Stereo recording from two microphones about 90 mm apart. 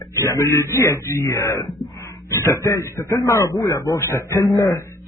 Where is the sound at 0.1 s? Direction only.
30° left (ahead or behind).